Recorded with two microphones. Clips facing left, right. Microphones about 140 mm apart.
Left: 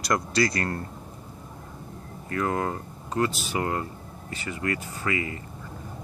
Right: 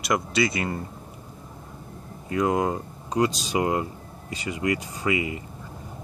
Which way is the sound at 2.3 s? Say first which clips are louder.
Right 4 dB; 15° right (ahead or behind).